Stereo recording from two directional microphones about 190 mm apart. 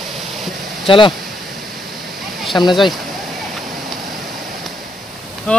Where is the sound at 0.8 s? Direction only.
25° left (ahead or behind).